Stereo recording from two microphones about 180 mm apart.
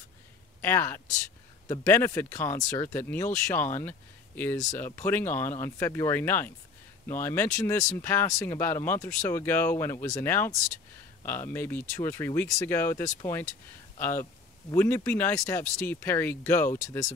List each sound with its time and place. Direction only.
0.6 s speech: 15° left (ahead or behind)